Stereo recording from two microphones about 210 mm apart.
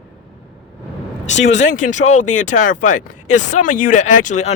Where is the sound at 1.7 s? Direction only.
35° left (ahead or behind).